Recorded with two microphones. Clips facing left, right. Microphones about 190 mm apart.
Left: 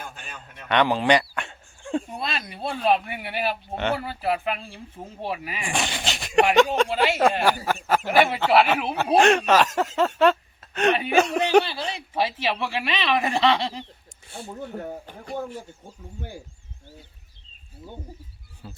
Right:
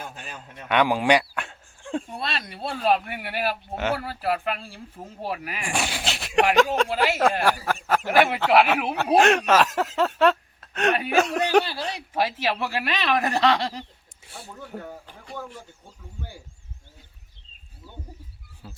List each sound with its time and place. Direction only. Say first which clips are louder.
0.7 s speech: even; 10° right (ahead or behind)
5.6 s speech: even; 5° right (ahead or behind)
15.0 s a man's voice: left 6 dB; 45° left (ahead or behind)
18.6 s speech: left 2 dB; centre (ahead or behind)